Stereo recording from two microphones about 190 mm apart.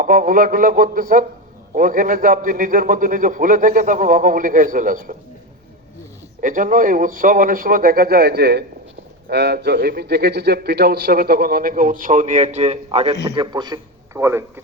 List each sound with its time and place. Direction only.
0.0 s a man's voice: 45° right (ahead or behind)
6.4 s a man's voice: 45° right (ahead or behind); by 14.6 s 15° right (ahead or behind)